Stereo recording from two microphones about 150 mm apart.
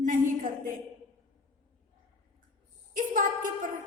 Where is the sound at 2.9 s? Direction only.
60° right (ahead or behind).